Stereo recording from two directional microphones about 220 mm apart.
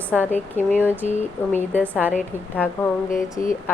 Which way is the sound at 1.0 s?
35° left (ahead or behind).